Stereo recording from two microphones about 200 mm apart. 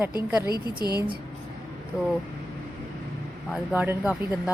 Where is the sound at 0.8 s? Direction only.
20° left (ahead or behind).